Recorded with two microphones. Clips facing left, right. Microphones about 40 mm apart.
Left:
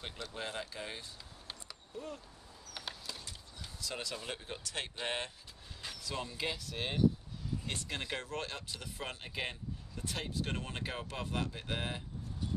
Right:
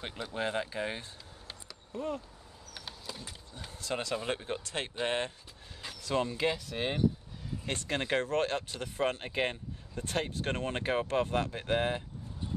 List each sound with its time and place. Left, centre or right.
0.0 s speech: centre
2.0 s speech: right
2.9 s a sound: centre
3.3 s speech: right
6.0 s speech: right
6.3 s speech: centre
7.7 s speech: right